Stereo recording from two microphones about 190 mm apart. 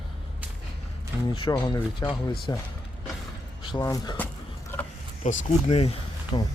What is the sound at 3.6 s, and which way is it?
Speech, 20° left (ahead or behind).